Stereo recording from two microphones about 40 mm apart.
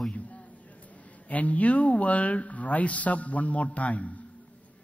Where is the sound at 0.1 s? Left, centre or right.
Left.